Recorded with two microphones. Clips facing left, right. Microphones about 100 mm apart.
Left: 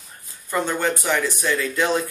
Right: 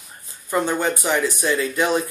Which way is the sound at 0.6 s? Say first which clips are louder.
Right 1 dB; 15° right (ahead or behind).